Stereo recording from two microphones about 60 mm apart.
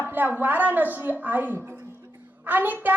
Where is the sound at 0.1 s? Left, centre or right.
Right.